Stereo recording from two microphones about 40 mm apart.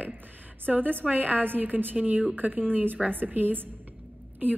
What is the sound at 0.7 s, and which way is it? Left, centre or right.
A woman's voice, right.